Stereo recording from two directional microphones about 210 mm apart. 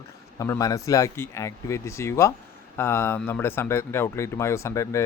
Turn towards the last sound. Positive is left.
turn(degrees=15)  # may be behind; listen again after turning